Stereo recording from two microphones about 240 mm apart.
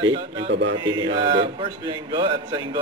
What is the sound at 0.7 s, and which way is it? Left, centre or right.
A man's voice, centre.